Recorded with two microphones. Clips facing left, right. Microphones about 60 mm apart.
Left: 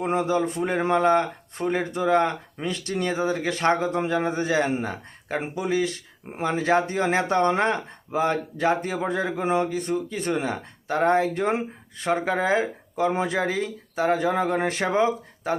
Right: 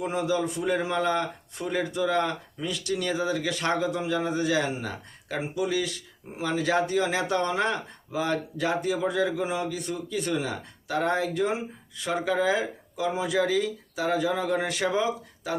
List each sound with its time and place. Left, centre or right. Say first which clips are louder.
0.0 s speech: left 4 dB; left